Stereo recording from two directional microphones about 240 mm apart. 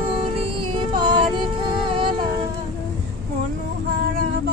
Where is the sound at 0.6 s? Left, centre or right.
Right.